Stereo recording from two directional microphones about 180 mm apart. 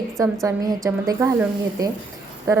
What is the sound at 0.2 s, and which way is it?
A woman's voice, 20° right (ahead or behind).